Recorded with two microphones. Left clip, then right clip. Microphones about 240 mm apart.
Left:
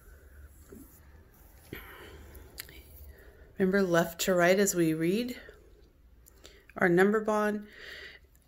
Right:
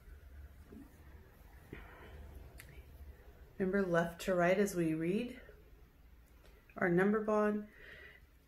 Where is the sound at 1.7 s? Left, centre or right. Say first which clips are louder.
Left 8 dB; left.